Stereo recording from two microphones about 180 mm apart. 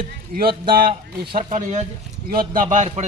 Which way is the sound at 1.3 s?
45° right (ahead or behind).